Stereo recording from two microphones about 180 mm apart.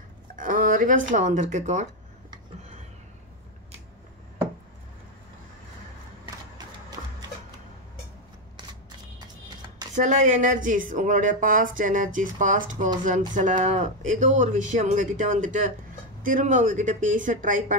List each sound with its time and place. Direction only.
0.4 s speech: 50° right (ahead or behind)
9.9 s speech: 45° right (ahead or behind)